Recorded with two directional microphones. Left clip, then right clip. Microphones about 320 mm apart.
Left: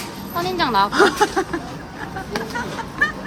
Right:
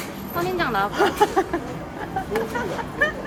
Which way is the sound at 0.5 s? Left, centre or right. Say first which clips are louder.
Left 6 dB; left.